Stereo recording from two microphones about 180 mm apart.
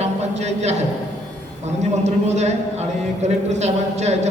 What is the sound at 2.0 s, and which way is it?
A woman's voice, 40° right (ahead or behind).